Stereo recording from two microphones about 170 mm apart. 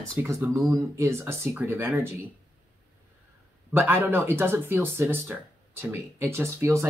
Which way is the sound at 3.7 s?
10° right (ahead or behind).